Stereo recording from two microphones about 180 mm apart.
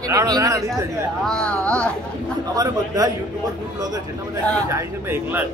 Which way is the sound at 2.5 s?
20° right (ahead or behind).